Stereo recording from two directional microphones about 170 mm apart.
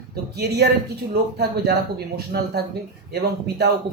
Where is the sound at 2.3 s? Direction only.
75° right (ahead or behind).